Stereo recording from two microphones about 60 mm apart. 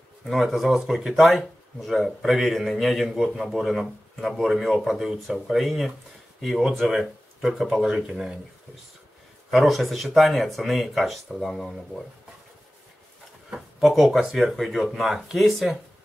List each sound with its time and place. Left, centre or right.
0.2 s speech: centre
9.5 s speech: centre
13.7 s speech: centre